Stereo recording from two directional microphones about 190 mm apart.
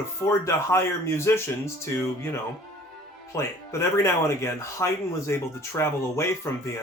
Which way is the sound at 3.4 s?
15° left (ahead or behind).